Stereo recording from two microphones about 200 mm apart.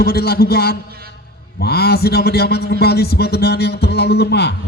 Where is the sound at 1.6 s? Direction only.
50° left (ahead or behind).